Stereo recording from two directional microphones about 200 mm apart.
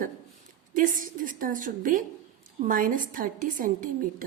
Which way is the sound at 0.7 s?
40° right (ahead or behind).